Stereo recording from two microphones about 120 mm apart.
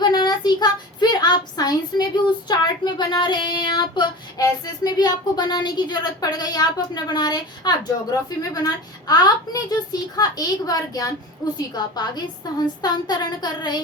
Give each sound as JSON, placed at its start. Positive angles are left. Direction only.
{"t": 0.0, "sound": "child singing", "side_deg": 35}
{"t": 4.4, "sound": "speech", "side_deg": 35}